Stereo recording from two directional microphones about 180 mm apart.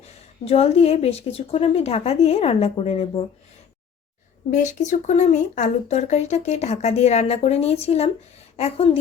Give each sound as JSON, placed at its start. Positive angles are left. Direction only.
{"t": 0.4, "sound": "speech", "side_deg": 35}
{"t": 4.5, "sound": "speech", "side_deg": 40}